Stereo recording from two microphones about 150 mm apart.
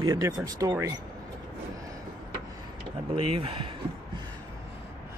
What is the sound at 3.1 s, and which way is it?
Speech, 40° right (ahead or behind).